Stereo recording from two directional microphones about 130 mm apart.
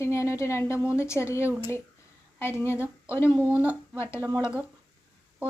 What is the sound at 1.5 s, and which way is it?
Speech, 15° right (ahead or behind).